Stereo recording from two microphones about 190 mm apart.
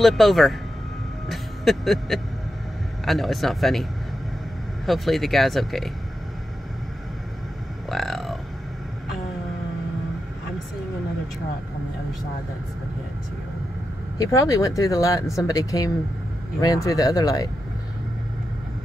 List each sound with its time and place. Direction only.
0.0 s speech: centre (ahead or behind)
1.3 s music: centre (ahead or behind)
3.1 s speech: centre (ahead or behind)
4.8 s speech: centre (ahead or behind)
7.9 s speech: centre (ahead or behind)
14.1 s speech: 20° left (ahead or behind)